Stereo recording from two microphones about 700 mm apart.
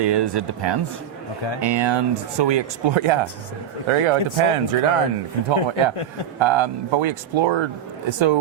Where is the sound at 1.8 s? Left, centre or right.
Right.